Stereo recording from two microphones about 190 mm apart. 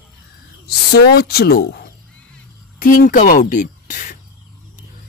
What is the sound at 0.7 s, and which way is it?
A woman's voice, 55° left (ahead or behind).